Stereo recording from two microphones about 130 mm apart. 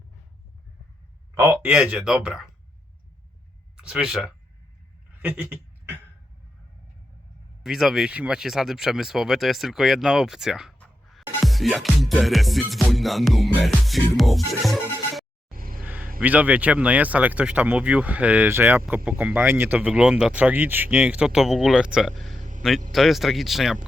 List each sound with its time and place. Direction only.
1.4 s speech: 10° right (ahead or behind)
3.8 s speech: 5° right (ahead or behind)
5.2 s a sound: 15° right (ahead or behind)
7.6 s music: centre (ahead or behind)
15.5 s music: 90° right
16.2 s speech: 10° right (ahead or behind)
22.4 s a sound: 75° right (ahead or behind)
22.9 s music: centre (ahead or behind)